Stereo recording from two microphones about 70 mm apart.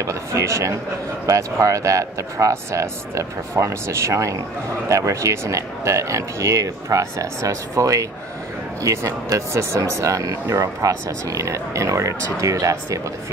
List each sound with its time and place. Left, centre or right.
0.0 s speech: right